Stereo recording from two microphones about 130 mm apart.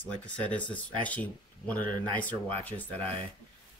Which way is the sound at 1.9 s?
35° right (ahead or behind).